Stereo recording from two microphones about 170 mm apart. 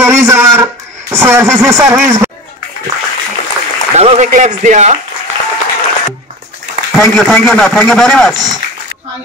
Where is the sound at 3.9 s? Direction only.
40° right (ahead or behind).